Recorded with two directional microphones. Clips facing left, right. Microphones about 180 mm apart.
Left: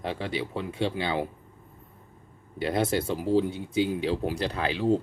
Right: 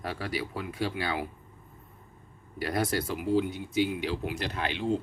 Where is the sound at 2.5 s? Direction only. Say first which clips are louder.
Left 3 dB; 25° left (ahead or behind).